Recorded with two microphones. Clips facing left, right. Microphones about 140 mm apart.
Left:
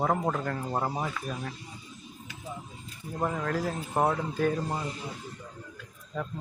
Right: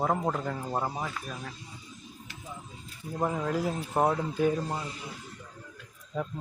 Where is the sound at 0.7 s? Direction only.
10° left (ahead or behind).